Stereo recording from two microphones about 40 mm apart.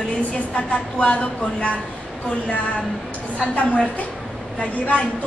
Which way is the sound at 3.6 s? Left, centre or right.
Left.